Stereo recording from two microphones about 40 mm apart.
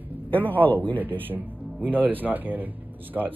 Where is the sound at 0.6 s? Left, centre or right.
Left.